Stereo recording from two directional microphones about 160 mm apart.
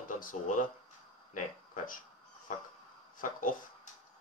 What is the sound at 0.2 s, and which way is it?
Speech, 55° left (ahead or behind).